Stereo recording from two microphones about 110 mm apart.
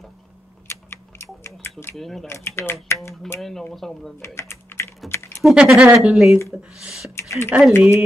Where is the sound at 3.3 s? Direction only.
Centre (ahead or behind).